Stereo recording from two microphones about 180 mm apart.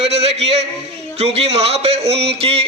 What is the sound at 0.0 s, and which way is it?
A man's voice, 35° right (ahead or behind).